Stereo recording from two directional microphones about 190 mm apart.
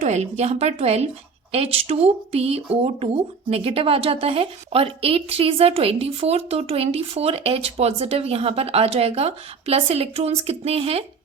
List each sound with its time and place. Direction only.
0.0 s a woman's voice: 35° right (ahead or behind)